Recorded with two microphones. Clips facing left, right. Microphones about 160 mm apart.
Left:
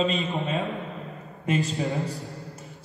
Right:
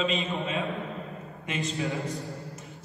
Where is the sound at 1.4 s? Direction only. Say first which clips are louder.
Left 7 dB; 35° left (ahead or behind).